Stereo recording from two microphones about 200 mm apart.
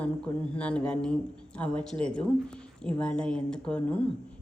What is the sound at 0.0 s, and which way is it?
A woman's voice, 5° left (ahead or behind).